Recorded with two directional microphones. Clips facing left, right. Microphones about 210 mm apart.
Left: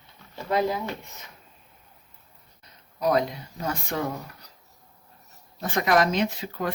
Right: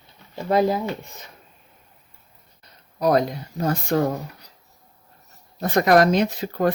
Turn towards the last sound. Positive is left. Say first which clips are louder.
# right 6 dB
turn(degrees=-45)  # may be behind; listen again after turning